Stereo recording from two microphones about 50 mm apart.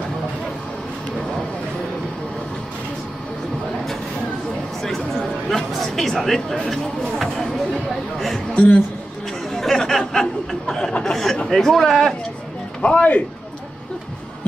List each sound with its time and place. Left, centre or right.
5.5 s speech: centre
8.5 s a man's voice: left
9.5 s chatter: centre
10.7 s speech: centre
11.1 s a sound: centre
11.4 s speech: centre
12.8 s a man's voice: left